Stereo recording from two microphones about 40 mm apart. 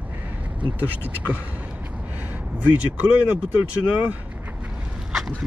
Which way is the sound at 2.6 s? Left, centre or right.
Right.